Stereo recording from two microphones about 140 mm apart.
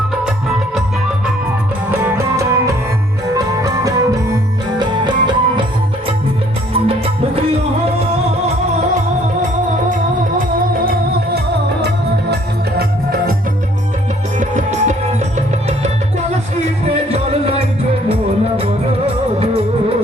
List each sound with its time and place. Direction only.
1.9 s music: 15° right (ahead or behind); by 5.6 s 35° right (ahead or behind)
6.7 s music: 40° right (ahead or behind)
12.7 s music: 90° right
14.3 s music: 55° right (ahead or behind)
16.9 s music: 45° right (ahead or behind)